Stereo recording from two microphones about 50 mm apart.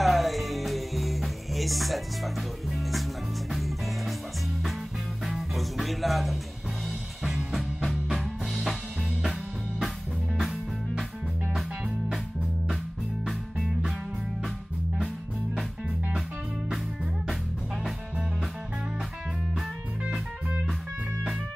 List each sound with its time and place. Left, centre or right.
0.0 s music: centre
5.2 s music: centre
7.5 s music: centre
16.6 s music: centre